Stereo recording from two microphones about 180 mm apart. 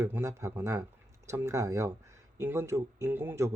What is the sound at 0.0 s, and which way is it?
Speech, 15° right (ahead or behind).